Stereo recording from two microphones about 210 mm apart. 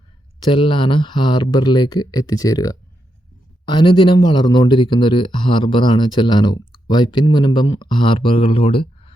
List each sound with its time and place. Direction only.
0.4 s speech: 25° left (ahead or behind)